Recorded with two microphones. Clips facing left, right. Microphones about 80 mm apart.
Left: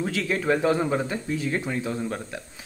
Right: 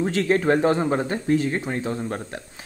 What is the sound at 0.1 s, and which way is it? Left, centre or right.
Speech, right.